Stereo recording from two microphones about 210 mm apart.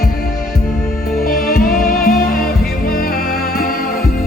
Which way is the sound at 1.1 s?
45° left (ahead or behind).